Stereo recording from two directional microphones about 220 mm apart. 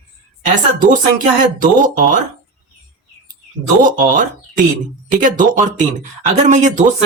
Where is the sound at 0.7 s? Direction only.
35° right (ahead or behind).